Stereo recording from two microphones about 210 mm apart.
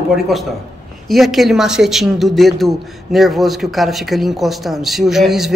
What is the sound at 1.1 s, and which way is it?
A man's voice, centre (ahead or behind).